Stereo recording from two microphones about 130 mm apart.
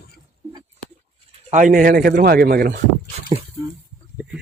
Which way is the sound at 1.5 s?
80° right.